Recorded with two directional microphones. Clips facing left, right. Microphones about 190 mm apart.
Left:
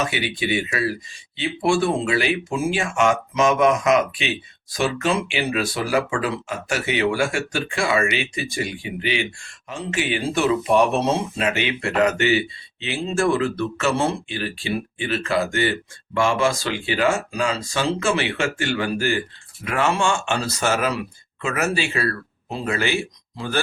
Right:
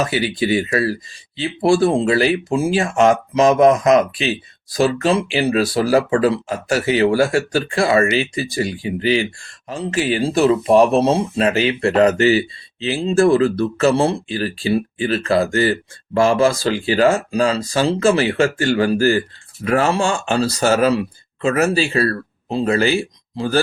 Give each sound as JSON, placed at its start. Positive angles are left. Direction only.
{"t": 0.0, "sound": "speech", "side_deg": -35}